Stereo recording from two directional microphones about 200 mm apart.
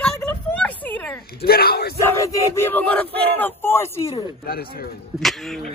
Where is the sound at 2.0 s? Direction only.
15° left (ahead or behind).